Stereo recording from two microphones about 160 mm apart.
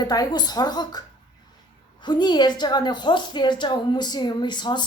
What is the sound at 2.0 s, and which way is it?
A woman's voice, 25° left (ahead or behind).